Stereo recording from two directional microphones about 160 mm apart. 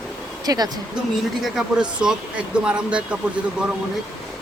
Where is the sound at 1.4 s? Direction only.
5° right (ahead or behind).